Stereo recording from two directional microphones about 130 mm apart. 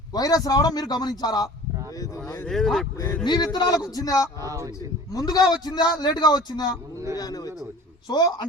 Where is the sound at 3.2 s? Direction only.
35° left (ahead or behind).